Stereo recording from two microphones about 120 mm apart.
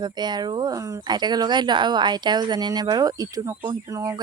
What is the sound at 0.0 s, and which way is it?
A woman's voice, 35° right (ahead or behind).